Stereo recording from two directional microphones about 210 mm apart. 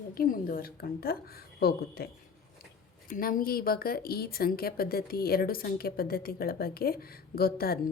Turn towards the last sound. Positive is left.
turn(degrees=45)  # may be behind; listen again after turning